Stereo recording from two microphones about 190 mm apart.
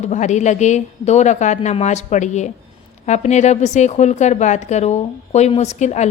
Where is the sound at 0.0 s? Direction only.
40° left (ahead or behind).